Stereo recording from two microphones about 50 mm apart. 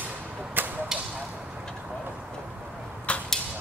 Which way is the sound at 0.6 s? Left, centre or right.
Right.